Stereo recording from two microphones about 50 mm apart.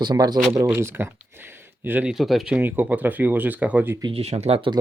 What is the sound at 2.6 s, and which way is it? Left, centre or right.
Speech, right.